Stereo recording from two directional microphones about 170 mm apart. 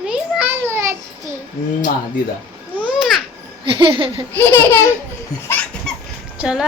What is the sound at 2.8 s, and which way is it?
Babbling, centre (ahead or behind).